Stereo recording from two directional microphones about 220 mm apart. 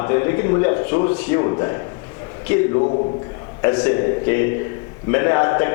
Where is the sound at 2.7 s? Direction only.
30° left (ahead or behind).